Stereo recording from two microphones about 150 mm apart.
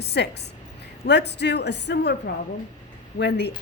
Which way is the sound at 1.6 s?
90° left.